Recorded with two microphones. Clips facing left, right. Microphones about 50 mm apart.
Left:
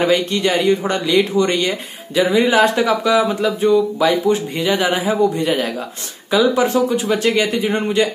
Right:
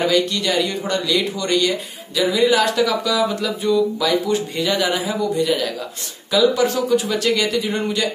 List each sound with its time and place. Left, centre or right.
0.0 s a man's voice: left